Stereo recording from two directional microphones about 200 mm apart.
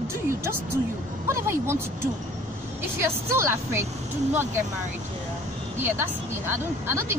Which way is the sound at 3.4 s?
15° right (ahead or behind).